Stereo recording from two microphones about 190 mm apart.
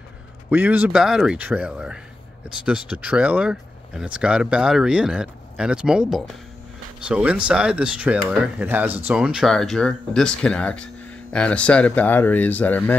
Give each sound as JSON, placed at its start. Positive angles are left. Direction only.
{"t": 0.5, "sound": "speech", "side_deg": -10}
{"t": 3.0, "sound": "speech", "side_deg": -5}